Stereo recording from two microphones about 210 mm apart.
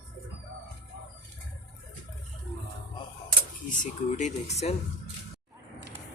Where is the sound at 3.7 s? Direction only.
35° left (ahead or behind).